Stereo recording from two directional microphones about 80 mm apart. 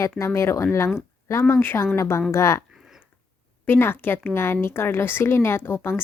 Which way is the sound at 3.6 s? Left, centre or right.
Left.